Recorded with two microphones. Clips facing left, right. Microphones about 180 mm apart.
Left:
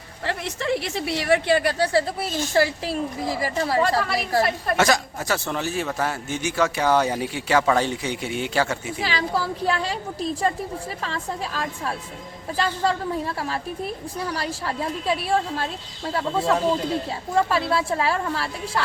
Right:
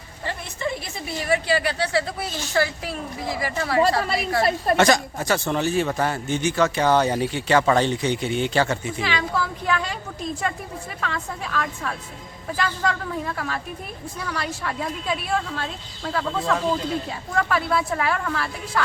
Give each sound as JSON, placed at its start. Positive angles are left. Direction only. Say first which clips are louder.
{"t": 0.3, "sound": "a woman's voice", "louder": "left 3 dB", "side_deg": 85}
{"t": 4.4, "sound": "a woman's voice", "louder": "right 4 dB", "side_deg": -30}
{"t": 4.8, "sound": "a man's voice", "louder": "even", "side_deg": 5}
{"t": 9.0, "sound": "a woman's voice", "louder": "left 3 dB", "side_deg": 35}